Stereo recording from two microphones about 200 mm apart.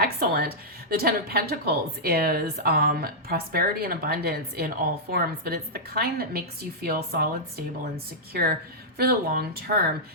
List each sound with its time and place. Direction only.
0.0 s a woman's voice: 50° right (ahead or behind)
8.3 s a woman's voice: 50° right (ahead or behind)